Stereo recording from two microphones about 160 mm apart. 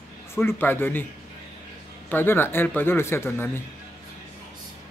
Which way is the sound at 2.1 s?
15° left (ahead or behind).